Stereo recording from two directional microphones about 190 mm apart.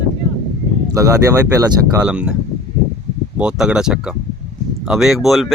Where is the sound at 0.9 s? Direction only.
15° right (ahead or behind).